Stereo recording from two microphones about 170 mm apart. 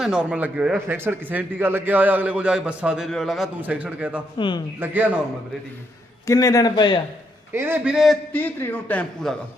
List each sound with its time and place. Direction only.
0.0 s a man's voice: 5° right (ahead or behind)
4.4 s speech: 30° left (ahead or behind)
4.8 s a man's voice: 10° right (ahead or behind)
6.2 s speech: 20° left (ahead or behind)
7.5 s a man's voice: 15° right (ahead or behind)
8.4 s speech: 10° left (ahead or behind)